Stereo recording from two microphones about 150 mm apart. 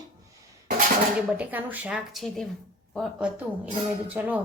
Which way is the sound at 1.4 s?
10° right (ahead or behind).